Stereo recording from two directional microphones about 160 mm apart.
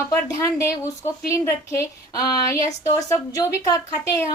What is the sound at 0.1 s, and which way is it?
A woman's voice, 15° left (ahead or behind).